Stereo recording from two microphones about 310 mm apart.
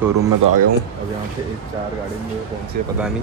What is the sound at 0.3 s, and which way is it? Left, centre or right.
Speech, right.